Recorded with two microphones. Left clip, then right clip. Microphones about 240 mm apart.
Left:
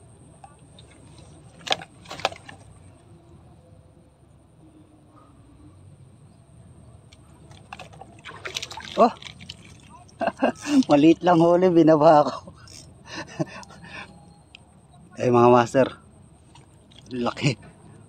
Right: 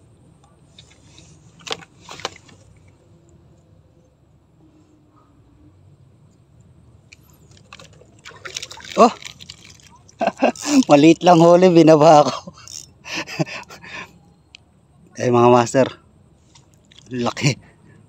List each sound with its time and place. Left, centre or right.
7.7 s pour: centre
8.9 s a sound: right
9.8 s speech: right
12.7 s a sound: right
15.1 s speech: centre
17.1 s speech: right